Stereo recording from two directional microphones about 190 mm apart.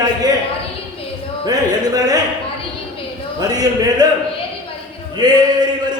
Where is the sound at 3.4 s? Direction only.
20° right (ahead or behind).